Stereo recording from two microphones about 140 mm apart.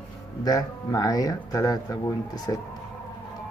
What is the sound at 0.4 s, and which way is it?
Speech, 25° left (ahead or behind).